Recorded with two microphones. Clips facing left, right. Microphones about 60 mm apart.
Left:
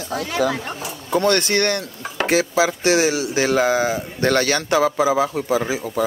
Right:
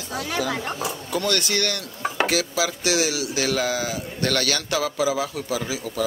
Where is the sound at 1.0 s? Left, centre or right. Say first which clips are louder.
Left 8 dB; left.